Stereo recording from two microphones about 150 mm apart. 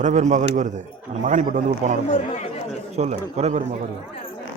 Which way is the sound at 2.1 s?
50° left (ahead or behind).